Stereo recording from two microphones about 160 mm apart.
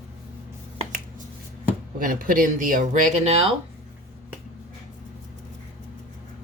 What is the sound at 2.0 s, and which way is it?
Speech, 60° right (ahead or behind).